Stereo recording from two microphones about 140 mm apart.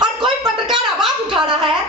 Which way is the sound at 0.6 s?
5° right (ahead or behind).